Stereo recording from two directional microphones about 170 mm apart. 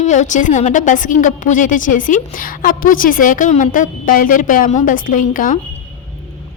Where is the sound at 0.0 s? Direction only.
45° left (ahead or behind).